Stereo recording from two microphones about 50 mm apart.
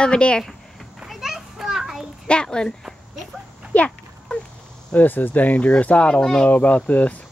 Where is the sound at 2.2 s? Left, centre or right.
Centre.